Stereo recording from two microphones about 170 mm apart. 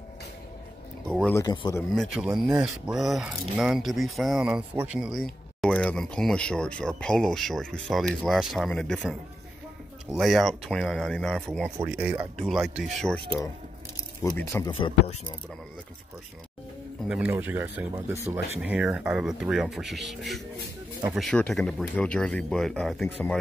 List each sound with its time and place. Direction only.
1.0 s speech: 5° left (ahead or behind)
1.3 s speech: 25° left (ahead or behind)
2.0 s speech: centre (ahead or behind)
10.1 s speech: centre (ahead or behind)
13.9 s speech: 15° left (ahead or behind)
14.7 s speech: 35° left (ahead or behind)
17.3 s speech: 10° right (ahead or behind)